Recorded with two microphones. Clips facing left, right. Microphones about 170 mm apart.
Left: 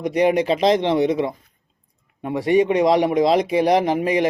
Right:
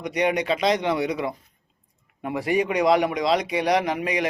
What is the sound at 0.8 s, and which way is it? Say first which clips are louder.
Speech: left 6 dB; 25° left (ahead or behind).